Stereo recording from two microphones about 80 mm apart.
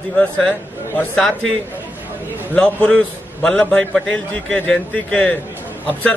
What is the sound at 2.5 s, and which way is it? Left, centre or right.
A man's voice, centre.